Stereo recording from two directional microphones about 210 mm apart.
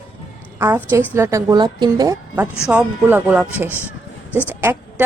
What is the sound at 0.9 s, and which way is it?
A woman's voice, 10° right (ahead or behind).